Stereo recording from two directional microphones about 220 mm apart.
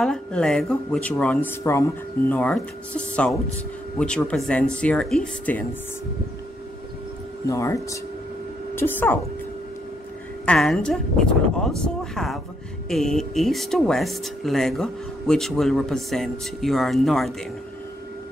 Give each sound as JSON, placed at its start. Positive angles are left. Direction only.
{"t": 0.0, "sound": "speech", "side_deg": 5}
{"t": 7.4, "sound": "speech", "side_deg": 15}
{"t": 10.4, "sound": "speech", "side_deg": 0}